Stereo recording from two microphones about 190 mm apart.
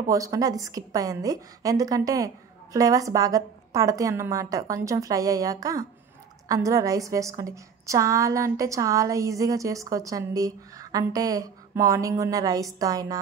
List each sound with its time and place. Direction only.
0.1 s a woman's voice: 20° right (ahead or behind)